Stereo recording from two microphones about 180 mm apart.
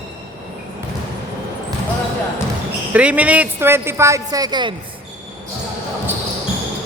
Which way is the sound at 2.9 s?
10° right (ahead or behind).